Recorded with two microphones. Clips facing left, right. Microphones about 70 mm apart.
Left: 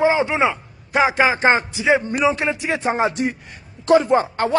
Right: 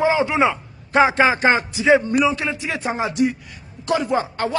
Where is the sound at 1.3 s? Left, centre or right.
Left.